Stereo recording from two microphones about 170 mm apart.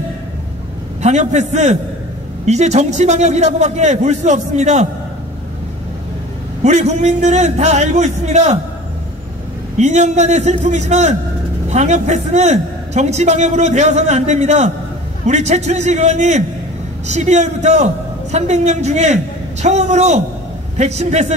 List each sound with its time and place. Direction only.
1.0 s a man's voice: 40° right (ahead or behind)
6.6 s a man's voice: 40° right (ahead or behind)
9.8 s a man's voice: 40° right (ahead or behind)